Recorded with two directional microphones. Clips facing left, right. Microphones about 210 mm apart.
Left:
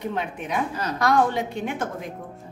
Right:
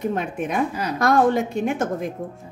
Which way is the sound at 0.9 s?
50° right (ahead or behind).